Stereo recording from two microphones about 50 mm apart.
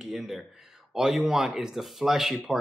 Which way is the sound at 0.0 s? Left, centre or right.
Centre.